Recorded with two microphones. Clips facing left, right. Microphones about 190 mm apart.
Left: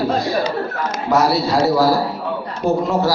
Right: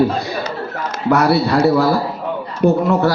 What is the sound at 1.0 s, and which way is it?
A man's voice, 60° right (ahead or behind).